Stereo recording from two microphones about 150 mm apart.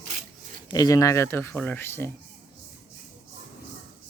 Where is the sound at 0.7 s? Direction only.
25° left (ahead or behind).